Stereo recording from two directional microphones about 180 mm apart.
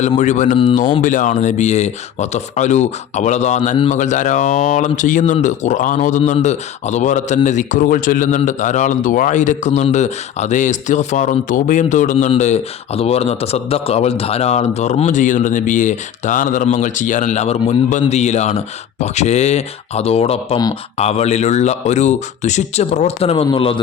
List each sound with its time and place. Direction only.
0.2 s a man's voice: 40° left (ahead or behind)